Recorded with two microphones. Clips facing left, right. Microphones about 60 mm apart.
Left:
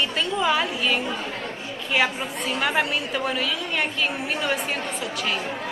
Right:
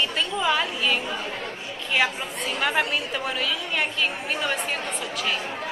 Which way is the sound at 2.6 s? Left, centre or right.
Centre.